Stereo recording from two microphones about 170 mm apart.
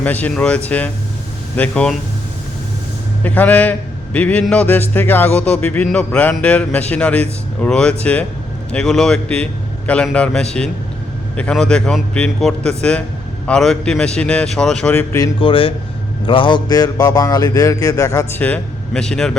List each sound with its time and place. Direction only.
0.0 s a man's voice: 10° left (ahead or behind)
3.2 s a man's voice: 10° left (ahead or behind)
15.4 s a man's voice: 30° left (ahead or behind)
18.4 s a man's voice: 5° left (ahead or behind)